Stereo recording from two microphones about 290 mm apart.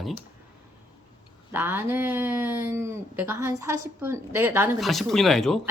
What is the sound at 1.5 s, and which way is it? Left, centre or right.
Speech, centre.